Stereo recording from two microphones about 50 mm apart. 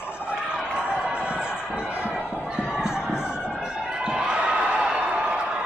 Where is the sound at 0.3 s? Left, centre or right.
Right.